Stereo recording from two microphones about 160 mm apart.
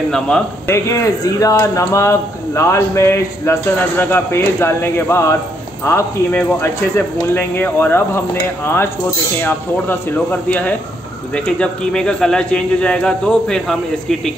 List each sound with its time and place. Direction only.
0.7 s speech: 20° left (ahead or behind)
9.4 s speech: 10° left (ahead or behind)